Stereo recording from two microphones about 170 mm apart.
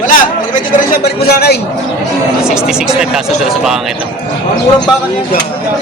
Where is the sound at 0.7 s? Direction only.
65° left (ahead or behind).